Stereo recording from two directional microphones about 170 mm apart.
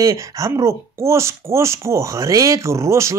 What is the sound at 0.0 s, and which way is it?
Speech, 20° right (ahead or behind).